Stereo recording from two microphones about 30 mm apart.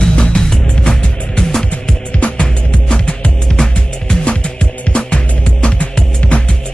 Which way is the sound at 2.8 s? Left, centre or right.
Left.